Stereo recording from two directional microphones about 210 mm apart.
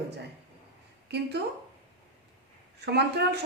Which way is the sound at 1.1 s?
50° right (ahead or behind).